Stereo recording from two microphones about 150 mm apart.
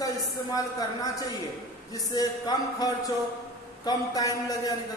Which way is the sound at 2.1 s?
25° left (ahead or behind).